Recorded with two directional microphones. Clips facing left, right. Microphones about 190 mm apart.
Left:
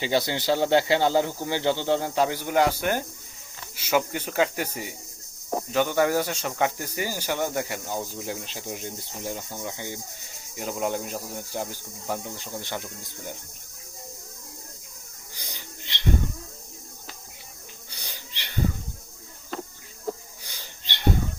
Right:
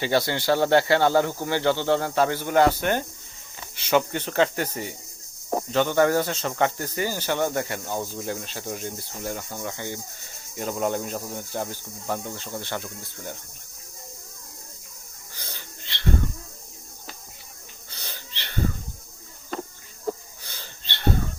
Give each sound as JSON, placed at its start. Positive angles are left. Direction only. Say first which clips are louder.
{"t": 0.0, "sound": "speech", "louder": "right 2 dB", "side_deg": 15}
{"t": 15.4, "sound": "bird", "louder": "right 1 dB", "side_deg": 15}
{"t": 17.9, "sound": "wheeze", "louder": "right 3 dB", "side_deg": 15}
{"t": 19.5, "sound": "a sound", "louder": "right 2 dB", "side_deg": -50}
{"t": 20.4, "sound": "wheeze", "louder": "right 1 dB", "side_deg": 15}